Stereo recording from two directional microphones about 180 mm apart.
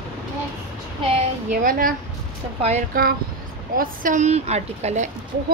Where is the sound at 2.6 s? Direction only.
40° right (ahead or behind).